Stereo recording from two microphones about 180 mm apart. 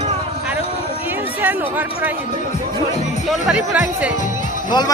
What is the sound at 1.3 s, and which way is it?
Speech, 10° right (ahead or behind).